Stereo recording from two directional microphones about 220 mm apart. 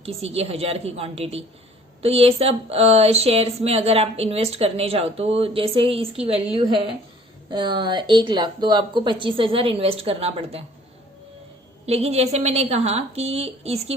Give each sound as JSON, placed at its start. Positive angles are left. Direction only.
{"t": 0.0, "sound": "speech", "side_deg": -30}
{"t": 11.9, "sound": "speech", "side_deg": -30}